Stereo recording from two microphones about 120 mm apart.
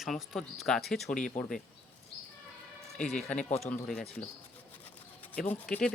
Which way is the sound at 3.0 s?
75° left (ahead or behind).